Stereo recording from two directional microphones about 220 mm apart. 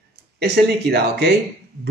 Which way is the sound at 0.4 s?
50° right (ahead or behind).